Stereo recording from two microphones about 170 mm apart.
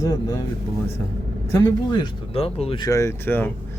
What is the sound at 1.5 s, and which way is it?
Speech, 20° left (ahead or behind).